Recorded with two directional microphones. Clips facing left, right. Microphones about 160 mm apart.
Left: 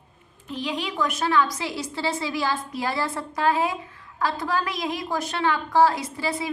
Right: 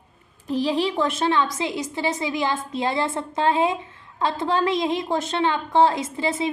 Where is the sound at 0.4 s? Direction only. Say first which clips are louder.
Right 7 dB; 35° right (ahead or behind).